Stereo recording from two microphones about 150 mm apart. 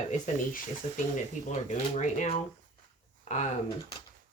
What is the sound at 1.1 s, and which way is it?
Speech, 55° left (ahead or behind).